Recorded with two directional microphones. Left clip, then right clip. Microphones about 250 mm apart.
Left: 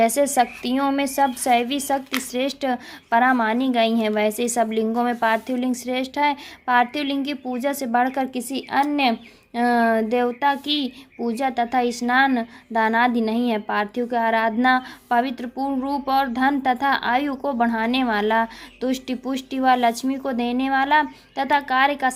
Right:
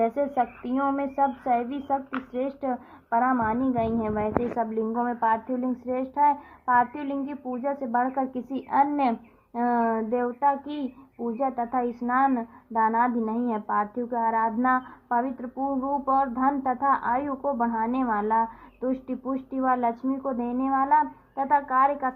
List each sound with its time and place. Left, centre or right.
0.0 s a woman's voice: left
7.3 s a woman's voice: left
8.3 s a woman's voice: centre
9.6 s a woman's voice: left
11.3 s a woman's voice: left
11.9 s a woman's voice: left
12.3 s a woman's voice: left
15.5 s a woman's voice: left
16.0 s a woman's voice: left